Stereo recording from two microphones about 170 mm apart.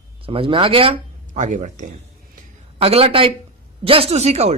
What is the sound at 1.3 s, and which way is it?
Speech, 45° right (ahead or behind).